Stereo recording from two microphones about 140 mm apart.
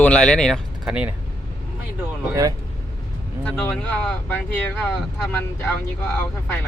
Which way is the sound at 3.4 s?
5° left (ahead or behind).